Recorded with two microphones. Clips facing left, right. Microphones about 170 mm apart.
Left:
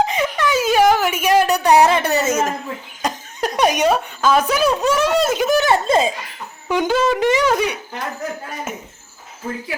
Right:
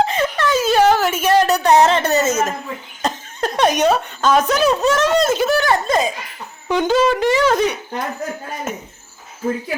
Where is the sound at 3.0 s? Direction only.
10° left (ahead or behind).